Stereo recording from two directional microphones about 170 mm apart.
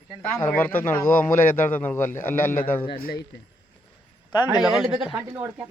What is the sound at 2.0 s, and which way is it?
A man's voice, 50° left (ahead or behind).